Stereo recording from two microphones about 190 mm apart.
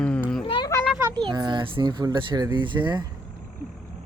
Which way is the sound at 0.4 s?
25° left (ahead or behind).